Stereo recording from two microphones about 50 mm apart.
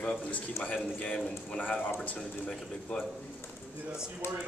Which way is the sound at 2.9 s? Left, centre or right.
Left.